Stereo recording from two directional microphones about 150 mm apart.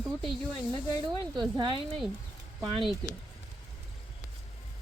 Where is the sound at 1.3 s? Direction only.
30° right (ahead or behind).